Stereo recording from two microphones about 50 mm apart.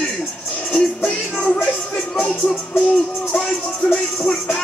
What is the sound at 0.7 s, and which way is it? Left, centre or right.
Music, left.